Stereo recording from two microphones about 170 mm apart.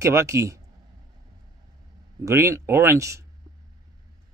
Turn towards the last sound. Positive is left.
turn(degrees=-15)  # may be behind; listen again after turning